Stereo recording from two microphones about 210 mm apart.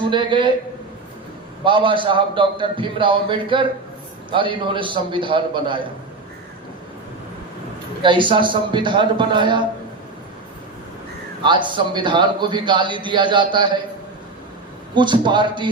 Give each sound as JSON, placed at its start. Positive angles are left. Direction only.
{"t": 0.0, "sound": "a man's voice", "side_deg": -20}
{"t": 1.6, "sound": "a man's voice", "side_deg": -25}
{"t": 8.0, "sound": "a man's voice", "side_deg": -25}
{"t": 11.4, "sound": "a man's voice", "side_deg": -20}
{"t": 14.9, "sound": "a man's voice", "side_deg": -20}